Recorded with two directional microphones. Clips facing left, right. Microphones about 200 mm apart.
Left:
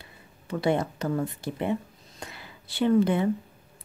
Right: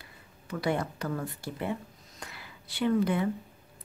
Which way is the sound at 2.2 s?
25° left (ahead or behind).